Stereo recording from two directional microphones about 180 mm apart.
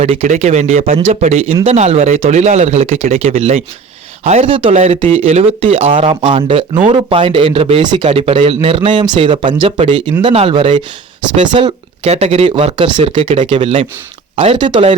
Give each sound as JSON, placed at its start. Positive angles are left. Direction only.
{"t": 0.0, "sound": "speech", "side_deg": -35}